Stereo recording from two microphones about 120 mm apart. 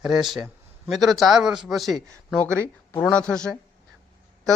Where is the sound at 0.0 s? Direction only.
5° right (ahead or behind).